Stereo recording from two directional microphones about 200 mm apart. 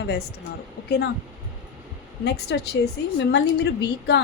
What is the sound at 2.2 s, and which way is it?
A woman's voice, 55° left (ahead or behind).